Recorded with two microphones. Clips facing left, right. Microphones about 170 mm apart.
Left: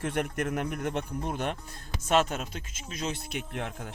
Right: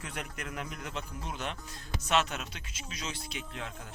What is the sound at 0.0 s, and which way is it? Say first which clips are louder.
Speech: left 11 dB; 50° left (ahead or behind).